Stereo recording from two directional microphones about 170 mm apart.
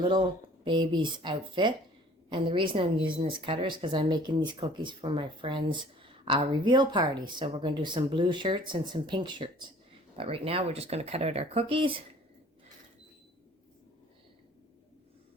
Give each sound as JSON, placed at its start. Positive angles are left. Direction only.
{"t": 0.0, "sound": "speech", "side_deg": -25}